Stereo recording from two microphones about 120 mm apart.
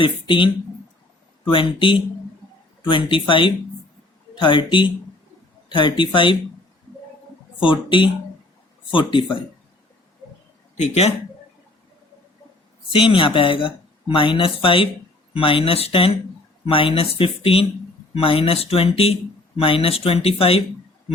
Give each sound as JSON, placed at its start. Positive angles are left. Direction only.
{"t": 0.0, "sound": "speech", "side_deg": 45}
{"t": 7.6, "sound": "speech", "side_deg": 45}
{"t": 10.8, "sound": "speech", "side_deg": 60}
{"t": 12.9, "sound": "speech", "side_deg": 45}